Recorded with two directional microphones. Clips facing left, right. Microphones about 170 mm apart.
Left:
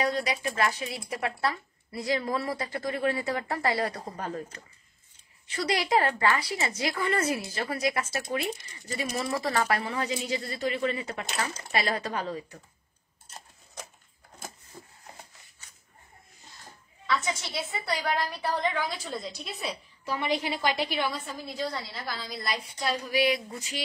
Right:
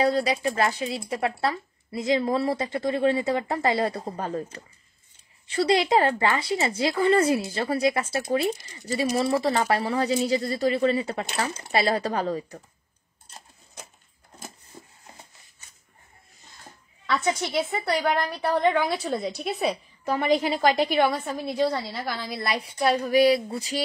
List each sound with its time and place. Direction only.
0.0 s a woman's voice: 30° right (ahead or behind)
17.0 s a woman's voice: 60° right (ahead or behind)
20.1 s a woman's voice: 45° right (ahead or behind); by 23.1 s 65° right (ahead or behind)
23.1 s a sound: 35° right (ahead or behind)